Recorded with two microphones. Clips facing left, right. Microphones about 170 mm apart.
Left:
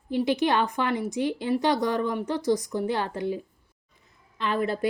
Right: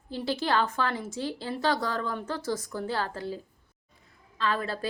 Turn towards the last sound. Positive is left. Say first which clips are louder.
# left 4 dB
turn(degrees=20)  # may be behind; listen again after turning